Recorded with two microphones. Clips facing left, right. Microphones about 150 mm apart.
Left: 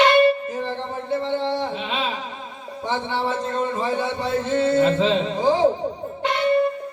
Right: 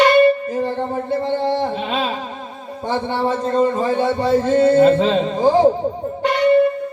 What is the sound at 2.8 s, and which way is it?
A man's voice, 45° right (ahead or behind).